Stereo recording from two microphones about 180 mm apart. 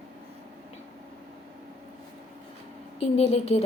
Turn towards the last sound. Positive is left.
turn(degrees=35)  # may be behind; listen again after turning